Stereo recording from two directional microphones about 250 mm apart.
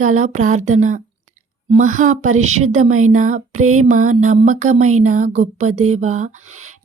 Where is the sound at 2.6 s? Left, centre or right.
Right.